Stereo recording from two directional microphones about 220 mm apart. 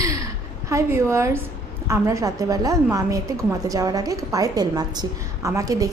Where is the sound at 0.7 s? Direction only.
15° right (ahead or behind).